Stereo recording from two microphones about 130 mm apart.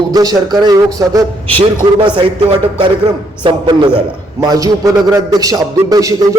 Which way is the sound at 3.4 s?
40° right (ahead or behind).